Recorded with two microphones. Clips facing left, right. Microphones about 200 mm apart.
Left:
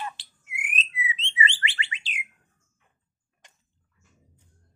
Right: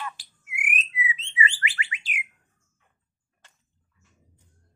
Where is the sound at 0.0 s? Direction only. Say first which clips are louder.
Left 1 dB; 25° left (ahead or behind).